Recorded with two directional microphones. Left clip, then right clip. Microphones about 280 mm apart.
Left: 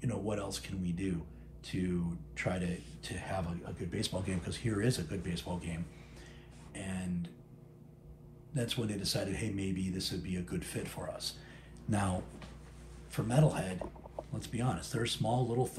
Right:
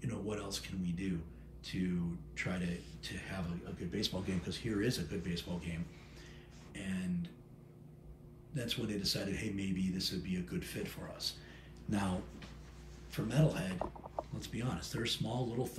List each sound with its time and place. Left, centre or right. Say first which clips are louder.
0.0 s a sound: left 4 dB; centre
1.6 s speech: left 3 dB; centre
8.5 s speech: left 2 dB; centre
11.9 s speech: left 3 dB; centre